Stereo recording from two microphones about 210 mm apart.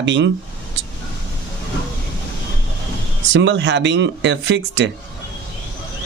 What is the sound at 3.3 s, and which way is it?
Speech, 60° right (ahead or behind).